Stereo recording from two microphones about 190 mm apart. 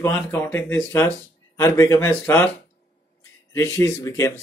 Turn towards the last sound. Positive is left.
turn(degrees=15)  # may be behind; listen again after turning